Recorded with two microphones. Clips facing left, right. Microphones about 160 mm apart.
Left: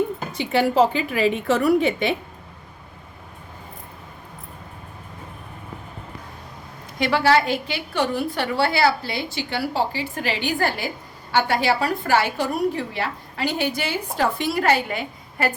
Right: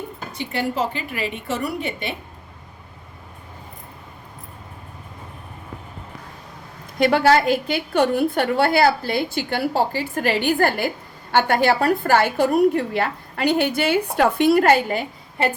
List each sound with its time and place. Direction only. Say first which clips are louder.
0.3 s a woman's voice: left 6 dB; 90° left
7.0 s a woman's voice: right 3 dB; 50° right (ahead or behind)
14.8 s a woman's voice: right 4 dB; 35° right (ahead or behind)